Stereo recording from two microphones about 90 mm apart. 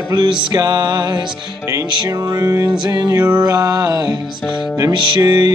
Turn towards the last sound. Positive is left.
turn(degrees=-55)  # may be behind; listen again after turning